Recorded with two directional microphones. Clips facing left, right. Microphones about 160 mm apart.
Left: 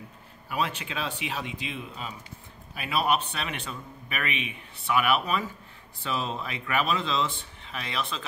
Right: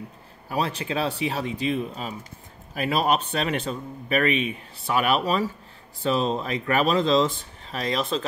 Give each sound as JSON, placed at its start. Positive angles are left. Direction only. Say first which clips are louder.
{"t": 0.5, "sound": "speech", "louder": "right 4 dB", "side_deg": -35}